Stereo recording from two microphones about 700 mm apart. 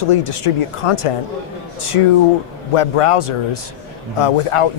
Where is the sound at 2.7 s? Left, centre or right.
Left.